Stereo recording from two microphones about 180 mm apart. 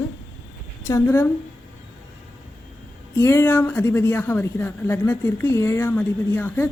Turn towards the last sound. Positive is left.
turn(degrees=10)  # may be behind; listen again after turning